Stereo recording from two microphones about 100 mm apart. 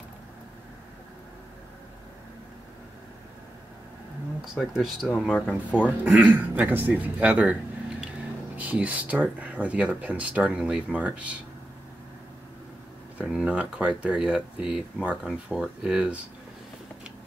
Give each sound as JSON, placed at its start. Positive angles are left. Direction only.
{"t": 4.6, "sound": "speech", "side_deg": -5}
{"t": 5.8, "sound": "speech", "side_deg": -15}
{"t": 8.5, "sound": "speech", "side_deg": -15}
{"t": 13.2, "sound": "speech", "side_deg": -5}